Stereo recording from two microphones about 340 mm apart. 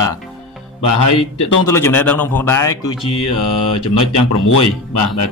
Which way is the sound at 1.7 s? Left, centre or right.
Centre.